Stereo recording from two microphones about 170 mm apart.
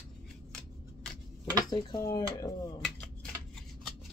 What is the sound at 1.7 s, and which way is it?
Speech, 20° left (ahead or behind).